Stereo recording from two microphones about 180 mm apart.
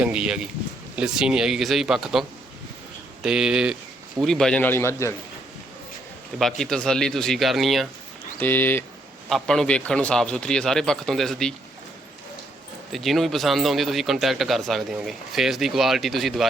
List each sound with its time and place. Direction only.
0.0 s a man's voice: 5° right (ahead or behind)
3.2 s a man's voice: 5° right (ahead or behind); by 5.1 s 15° left (ahead or behind)
6.4 s a man's voice: 5° left (ahead or behind)
8.4 s a man's voice: 10° left (ahead or behind)
12.9 s a man's voice: centre (ahead or behind)